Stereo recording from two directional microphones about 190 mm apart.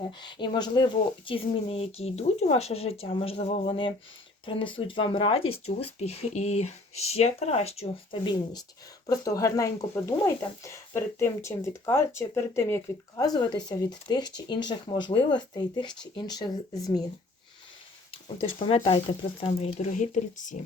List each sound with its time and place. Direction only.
0.1 s speech: 25° left (ahead or behind)
18.1 s speech: 30° left (ahead or behind)